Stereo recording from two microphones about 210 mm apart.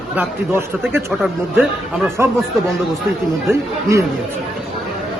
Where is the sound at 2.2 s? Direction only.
10° right (ahead or behind).